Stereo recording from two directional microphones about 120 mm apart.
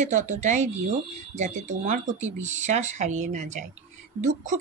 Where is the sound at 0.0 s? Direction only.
80° right.